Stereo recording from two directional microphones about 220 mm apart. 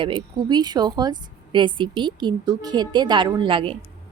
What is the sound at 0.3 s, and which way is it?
A woman's voice, 20° right (ahead or behind).